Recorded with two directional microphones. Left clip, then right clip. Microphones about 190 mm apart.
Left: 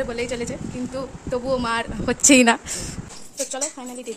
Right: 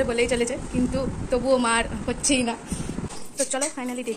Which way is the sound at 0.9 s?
15° left (ahead or behind).